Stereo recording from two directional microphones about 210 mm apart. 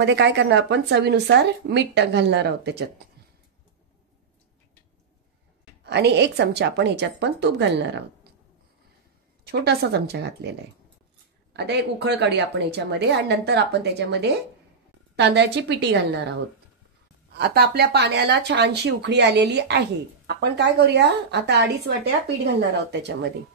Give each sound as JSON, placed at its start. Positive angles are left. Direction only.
{"t": 0.0, "sound": "speech", "side_deg": -55}
{"t": 5.9, "sound": "a woman's voice", "side_deg": -55}
{"t": 9.5, "sound": "a woman's voice", "side_deg": -50}
{"t": 11.5, "sound": "a woman's voice", "side_deg": -55}
{"t": 17.4, "sound": "a woman's voice", "side_deg": -50}